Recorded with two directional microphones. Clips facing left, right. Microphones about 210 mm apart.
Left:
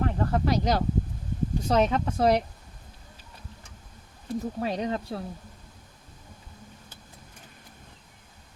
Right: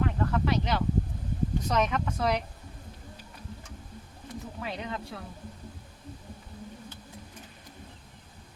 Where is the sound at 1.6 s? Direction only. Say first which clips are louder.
Left 6 dB; 30° left (ahead or behind).